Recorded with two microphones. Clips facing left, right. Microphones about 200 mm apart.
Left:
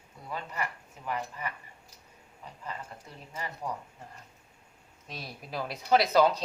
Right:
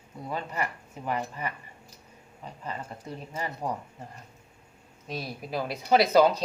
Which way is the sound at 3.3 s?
35° right (ahead or behind).